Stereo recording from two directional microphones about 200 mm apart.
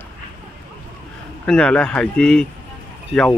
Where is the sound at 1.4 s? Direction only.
5° left (ahead or behind).